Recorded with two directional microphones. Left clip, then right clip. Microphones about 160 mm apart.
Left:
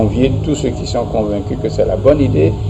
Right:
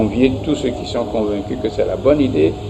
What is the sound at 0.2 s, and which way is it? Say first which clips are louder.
A man's voice: left 1 dB; 45° left (ahead or behind).